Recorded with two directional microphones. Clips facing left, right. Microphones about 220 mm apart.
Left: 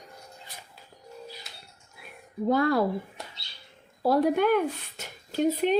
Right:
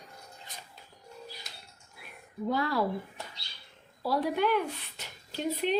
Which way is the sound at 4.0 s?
50° left (ahead or behind).